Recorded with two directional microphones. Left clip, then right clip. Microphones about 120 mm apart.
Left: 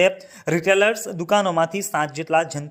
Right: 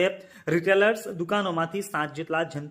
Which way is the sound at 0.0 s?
25° left (ahead or behind).